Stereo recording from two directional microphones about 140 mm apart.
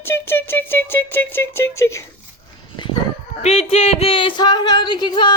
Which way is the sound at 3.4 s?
45° left (ahead or behind).